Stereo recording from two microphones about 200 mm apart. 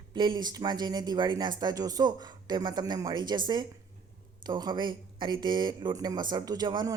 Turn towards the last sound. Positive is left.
turn(degrees=-20)  # may be behind; listen again after turning